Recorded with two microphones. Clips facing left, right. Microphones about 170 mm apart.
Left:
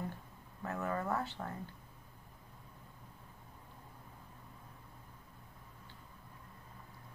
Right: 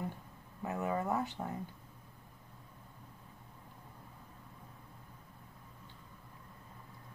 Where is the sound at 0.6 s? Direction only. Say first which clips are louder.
Right 2 dB; 15° right (ahead or behind).